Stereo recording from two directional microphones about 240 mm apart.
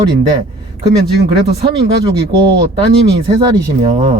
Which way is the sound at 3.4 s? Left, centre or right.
Centre.